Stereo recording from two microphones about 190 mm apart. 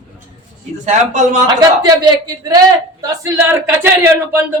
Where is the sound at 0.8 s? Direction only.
40° right (ahead or behind).